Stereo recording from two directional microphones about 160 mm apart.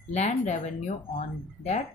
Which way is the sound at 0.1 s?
45° left (ahead or behind).